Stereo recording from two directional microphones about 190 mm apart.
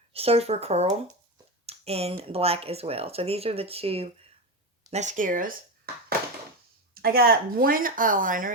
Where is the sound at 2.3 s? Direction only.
30° right (ahead or behind).